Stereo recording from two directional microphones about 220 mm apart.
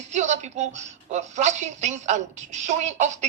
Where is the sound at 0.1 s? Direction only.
30° right (ahead or behind).